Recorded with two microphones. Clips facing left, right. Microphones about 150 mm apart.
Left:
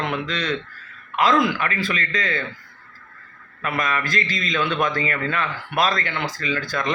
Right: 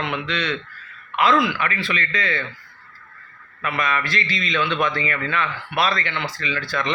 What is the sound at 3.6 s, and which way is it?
A man's voice, 45° left (ahead or behind).